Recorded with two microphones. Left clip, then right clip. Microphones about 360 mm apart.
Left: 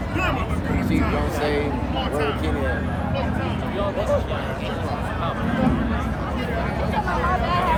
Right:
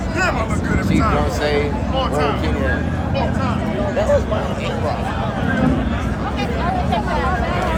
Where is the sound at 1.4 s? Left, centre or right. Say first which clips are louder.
Right 4 dB; right.